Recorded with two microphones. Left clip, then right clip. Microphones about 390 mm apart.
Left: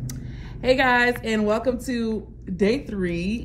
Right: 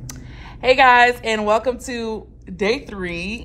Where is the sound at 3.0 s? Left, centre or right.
Right.